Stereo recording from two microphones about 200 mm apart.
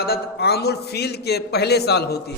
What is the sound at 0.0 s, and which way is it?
A man's voice, 55° left (ahead or behind).